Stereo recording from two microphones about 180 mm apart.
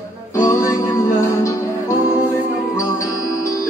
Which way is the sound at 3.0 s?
15° left (ahead or behind).